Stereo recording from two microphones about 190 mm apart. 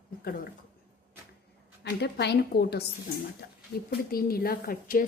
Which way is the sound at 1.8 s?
60° left (ahead or behind).